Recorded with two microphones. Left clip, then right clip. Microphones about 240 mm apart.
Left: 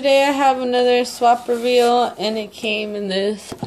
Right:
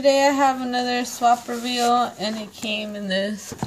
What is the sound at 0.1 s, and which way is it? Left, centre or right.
Speech, right.